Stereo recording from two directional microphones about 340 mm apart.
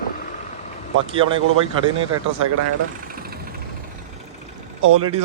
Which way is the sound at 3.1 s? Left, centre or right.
Right.